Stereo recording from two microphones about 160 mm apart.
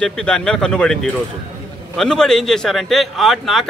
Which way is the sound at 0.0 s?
5° left (ahead or behind).